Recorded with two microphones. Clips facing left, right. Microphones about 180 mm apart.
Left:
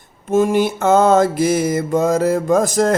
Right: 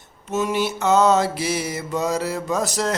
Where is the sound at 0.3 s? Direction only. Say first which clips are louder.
Left 7 dB; 50° left (ahead or behind).